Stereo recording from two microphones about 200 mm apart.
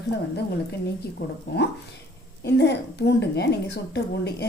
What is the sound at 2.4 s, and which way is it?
A woman's voice, 60° left (ahead or behind).